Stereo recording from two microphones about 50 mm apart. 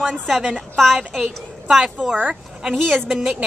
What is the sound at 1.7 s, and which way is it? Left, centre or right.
Speech, centre.